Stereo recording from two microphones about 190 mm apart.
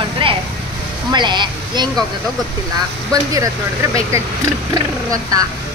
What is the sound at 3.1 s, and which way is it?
Speech, 15° right (ahead or behind).